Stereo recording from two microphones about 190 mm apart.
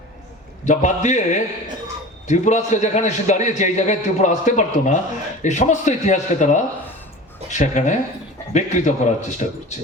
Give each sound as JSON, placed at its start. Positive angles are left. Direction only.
{"t": 0.6, "sound": "a man's voice", "side_deg": 40}